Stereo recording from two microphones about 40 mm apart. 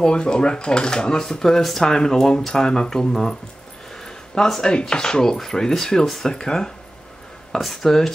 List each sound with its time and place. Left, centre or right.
0.0 s speech: left
3.9 s a sound: centre
4.7 s speech: left; by 6.3 s centre
6.3 s speech: centre